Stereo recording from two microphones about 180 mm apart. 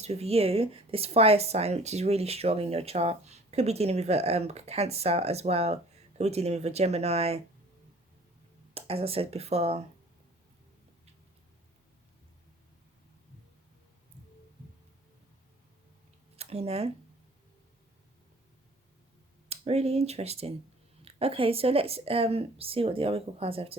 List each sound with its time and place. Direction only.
0.0 s speech: 35° right (ahead or behind)
8.7 s speech: 30° right (ahead or behind)
16.4 s speech: 35° right (ahead or behind)
19.5 s speech: 35° right (ahead or behind)